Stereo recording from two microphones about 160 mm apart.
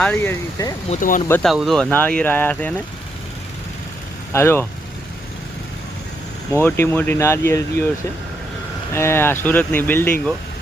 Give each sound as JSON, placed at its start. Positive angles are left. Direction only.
{"t": 0.0, "sound": "speech", "side_deg": 10}
{"t": 0.9, "sound": "speech", "side_deg": 40}
{"t": 1.4, "sound": "speech", "side_deg": 0}
{"t": 4.3, "sound": "speech", "side_deg": 15}
{"t": 6.5, "sound": "speech", "side_deg": 10}
{"t": 8.9, "sound": "speech", "side_deg": 15}